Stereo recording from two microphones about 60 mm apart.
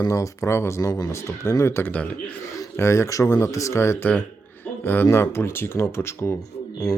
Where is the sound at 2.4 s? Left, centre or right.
Left.